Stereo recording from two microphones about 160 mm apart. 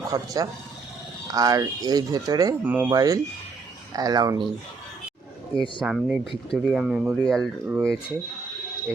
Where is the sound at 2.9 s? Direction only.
25° right (ahead or behind).